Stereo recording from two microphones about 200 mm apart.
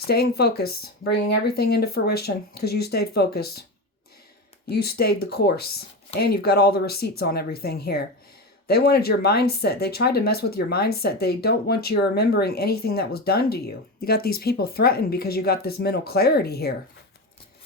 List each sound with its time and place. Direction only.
0.1 s speech: 55° left (ahead or behind)
4.7 s speech: 50° left (ahead or behind)